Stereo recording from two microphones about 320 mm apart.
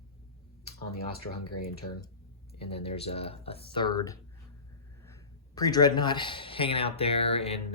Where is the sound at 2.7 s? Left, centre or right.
Centre.